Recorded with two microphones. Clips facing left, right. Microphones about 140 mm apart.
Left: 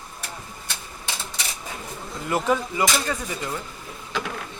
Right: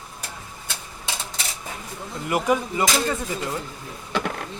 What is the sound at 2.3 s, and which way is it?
Speech, 15° right (ahead or behind).